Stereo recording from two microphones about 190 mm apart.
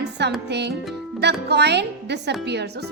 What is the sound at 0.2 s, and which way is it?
A woman's voice, 65° right (ahead or behind).